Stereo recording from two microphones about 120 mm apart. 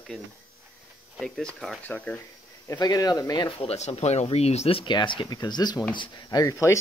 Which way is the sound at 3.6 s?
60° left (ahead or behind).